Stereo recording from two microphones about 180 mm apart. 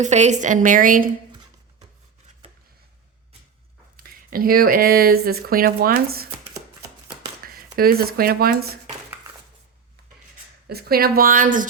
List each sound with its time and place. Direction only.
0.0 s a woman's voice: 40° right (ahead or behind)
3.9 s speech: 55° right (ahead or behind)
7.4 s speech: 55° right (ahead or behind)
10.7 s speech: 60° right (ahead or behind)